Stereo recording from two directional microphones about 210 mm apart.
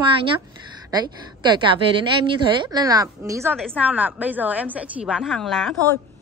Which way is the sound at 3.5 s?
Centre (ahead or behind).